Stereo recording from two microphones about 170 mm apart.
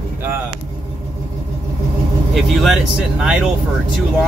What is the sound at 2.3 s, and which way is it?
Speech, centre (ahead or behind).